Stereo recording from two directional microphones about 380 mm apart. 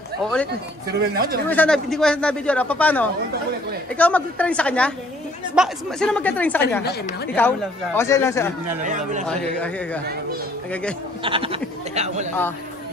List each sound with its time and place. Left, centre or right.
0.2 s a man's voice: centre
0.9 s speech: right
1.5 s a man's voice: centre
6.8 s speech: left
7.3 s speech: centre
8.8 s speech: centre
9.2 s a man's voice: centre
11.2 s a sound: centre